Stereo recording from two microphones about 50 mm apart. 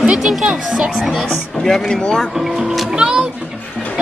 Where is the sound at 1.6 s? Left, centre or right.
Centre.